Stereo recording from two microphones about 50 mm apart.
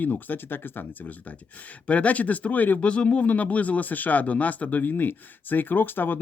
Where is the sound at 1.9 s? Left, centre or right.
Left.